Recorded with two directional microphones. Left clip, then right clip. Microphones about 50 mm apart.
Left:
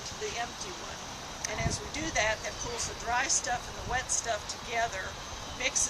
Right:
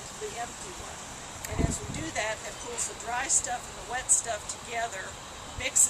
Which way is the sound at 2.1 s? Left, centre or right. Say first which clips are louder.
Left 3 dB; left.